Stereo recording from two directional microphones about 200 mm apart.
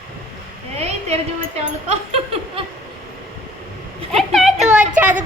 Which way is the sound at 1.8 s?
30° right (ahead or behind).